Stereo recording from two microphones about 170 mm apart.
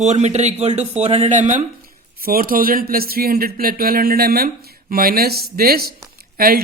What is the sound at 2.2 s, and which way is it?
Speech, 60° right (ahead or behind).